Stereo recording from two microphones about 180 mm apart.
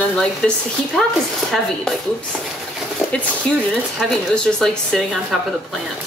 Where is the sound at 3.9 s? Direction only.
Centre (ahead or behind).